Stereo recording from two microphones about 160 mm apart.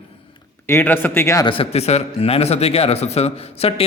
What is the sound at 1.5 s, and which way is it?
A man's voice, 40° left (ahead or behind).